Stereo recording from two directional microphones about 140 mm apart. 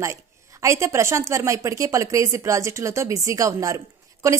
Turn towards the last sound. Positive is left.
turn(degrees=-20)  # may be behind; listen again after turning